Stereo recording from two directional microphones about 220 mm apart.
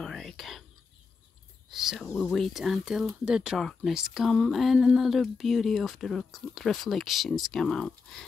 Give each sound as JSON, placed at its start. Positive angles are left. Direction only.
{"t": 0.0, "sound": "whispering", "side_deg": 0}
{"t": 1.7, "sound": "speech", "side_deg": 0}